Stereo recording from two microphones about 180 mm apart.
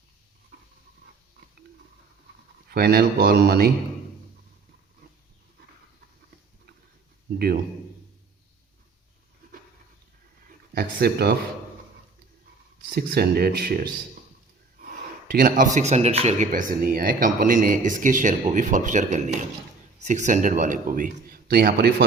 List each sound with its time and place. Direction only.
2.6 s speech: 60° right (ahead or behind)
10.8 s speech: 60° right (ahead or behind)
12.9 s speech: 60° right (ahead or behind)
15.3 s a man's voice: 50° right (ahead or behind); by 16.5 s 35° right (ahead or behind)
16.5 s a man's voice: 50° right (ahead or behind)